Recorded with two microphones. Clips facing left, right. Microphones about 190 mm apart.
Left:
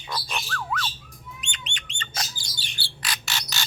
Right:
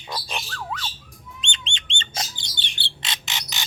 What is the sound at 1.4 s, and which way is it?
Bird, 25° right (ahead or behind).